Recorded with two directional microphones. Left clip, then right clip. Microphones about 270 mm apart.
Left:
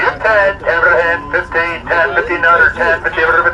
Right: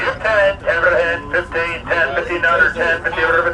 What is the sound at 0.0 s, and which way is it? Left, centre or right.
Speech, centre.